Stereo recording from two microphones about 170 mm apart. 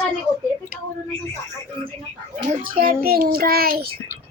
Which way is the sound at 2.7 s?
60° right (ahead or behind).